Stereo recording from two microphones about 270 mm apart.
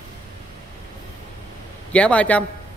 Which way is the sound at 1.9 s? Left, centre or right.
Centre.